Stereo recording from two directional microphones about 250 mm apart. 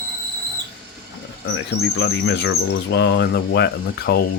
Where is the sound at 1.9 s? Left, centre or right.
Left.